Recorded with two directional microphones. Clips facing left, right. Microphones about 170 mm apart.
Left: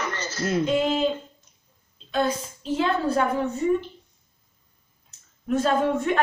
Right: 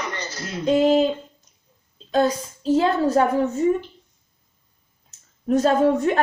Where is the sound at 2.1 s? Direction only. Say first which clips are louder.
Right 5 dB; 40° right (ahead or behind).